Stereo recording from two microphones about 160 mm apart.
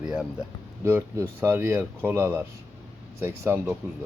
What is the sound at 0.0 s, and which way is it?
Speech, 5° right (ahead or behind).